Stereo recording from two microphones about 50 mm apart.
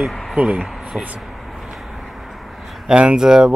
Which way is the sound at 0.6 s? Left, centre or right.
Centre.